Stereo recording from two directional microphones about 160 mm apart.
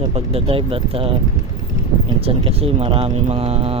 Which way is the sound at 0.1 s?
35° right (ahead or behind).